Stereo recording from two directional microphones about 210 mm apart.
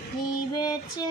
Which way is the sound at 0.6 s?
20° left (ahead or behind).